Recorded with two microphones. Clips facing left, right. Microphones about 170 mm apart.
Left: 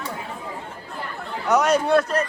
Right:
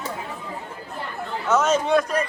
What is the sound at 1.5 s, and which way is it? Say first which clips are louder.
Speech: left 1 dB; 15° left (ahead or behind).